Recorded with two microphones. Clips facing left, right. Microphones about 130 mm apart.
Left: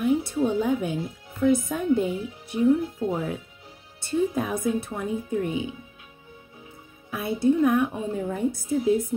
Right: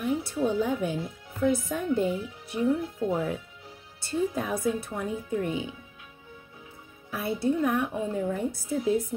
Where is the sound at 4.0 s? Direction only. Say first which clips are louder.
Left 4 dB; 20° left (ahead or behind).